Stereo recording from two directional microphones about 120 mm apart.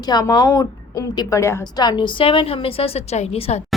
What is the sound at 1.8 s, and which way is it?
A woman's voice, 40° left (ahead or behind).